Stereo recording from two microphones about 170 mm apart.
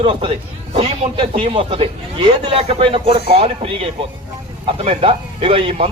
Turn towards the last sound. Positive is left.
turn(degrees=-35)  # may be behind; listen again after turning